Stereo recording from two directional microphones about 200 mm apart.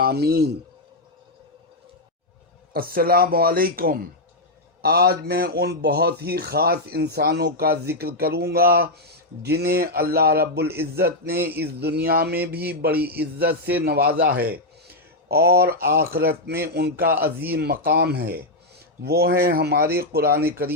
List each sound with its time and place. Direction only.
0.0 s speech: 50° right (ahead or behind)
2.7 s speech: 45° right (ahead or behind)